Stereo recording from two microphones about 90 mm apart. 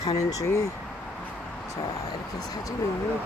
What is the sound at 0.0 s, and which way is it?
Speech, 40° left (ahead or behind).